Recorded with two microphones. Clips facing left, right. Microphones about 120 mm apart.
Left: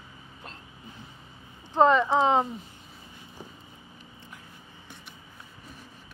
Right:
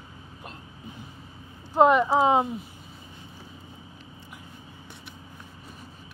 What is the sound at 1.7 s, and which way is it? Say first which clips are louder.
Speech: right 2 dB; 10° right (ahead or behind).